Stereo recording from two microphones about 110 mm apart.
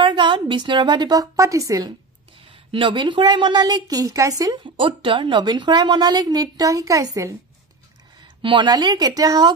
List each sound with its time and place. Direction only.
0.0 s a woman's voice: 45° right (ahead or behind)
2.7 s a woman's voice: 50° right (ahead or behind); by 4.6 s 30° right (ahead or behind)
4.6 s a woman's voice: 50° right (ahead or behind); by 7.3 s 30° right (ahead or behind)
8.4 s a woman's voice: 50° right (ahead or behind)